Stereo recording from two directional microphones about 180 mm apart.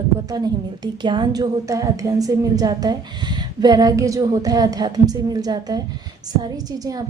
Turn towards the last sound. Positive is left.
turn(degrees=-20)  # may be behind; listen again after turning